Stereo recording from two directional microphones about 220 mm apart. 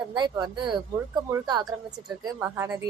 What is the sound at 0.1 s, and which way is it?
A woman's voice, 20° right (ahead or behind).